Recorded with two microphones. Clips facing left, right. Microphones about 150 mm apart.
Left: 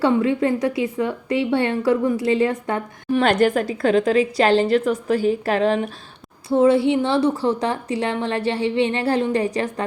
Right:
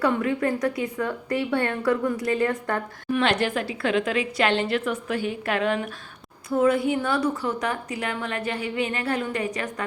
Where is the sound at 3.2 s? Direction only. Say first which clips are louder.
Left 7 dB; 45° left (ahead or behind).